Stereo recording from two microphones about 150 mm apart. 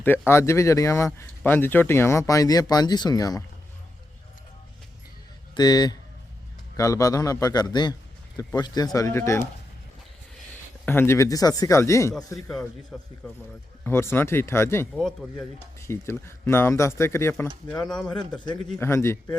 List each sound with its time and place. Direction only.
0.0 s speech: 15° left (ahead or behind)
5.5 s speech: 25° left (ahead or behind)
10.8 s speech: 15° left (ahead or behind)
13.8 s speech: 15° left (ahead or behind)
14.9 s speech: 5° left (ahead or behind)
15.8 s speech: 15° left (ahead or behind)
18.8 s speech: 15° left (ahead or behind)